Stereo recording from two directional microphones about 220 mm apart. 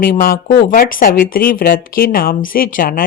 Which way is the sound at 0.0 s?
40° left (ahead or behind).